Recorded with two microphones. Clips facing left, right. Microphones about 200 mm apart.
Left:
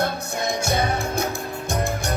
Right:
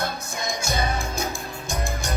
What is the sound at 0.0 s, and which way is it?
Music, 60° left (ahead or behind).